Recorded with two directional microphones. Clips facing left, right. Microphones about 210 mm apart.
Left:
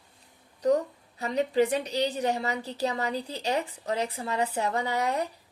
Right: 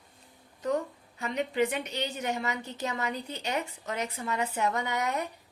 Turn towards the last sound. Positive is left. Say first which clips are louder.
# left 3 dB
turn(degrees=35)  # may be behind; listen again after turning